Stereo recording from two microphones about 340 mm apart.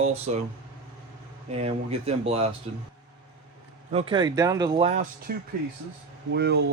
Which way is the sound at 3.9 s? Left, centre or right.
Centre.